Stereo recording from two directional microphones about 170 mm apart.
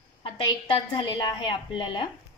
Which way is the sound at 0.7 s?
30° left (ahead or behind).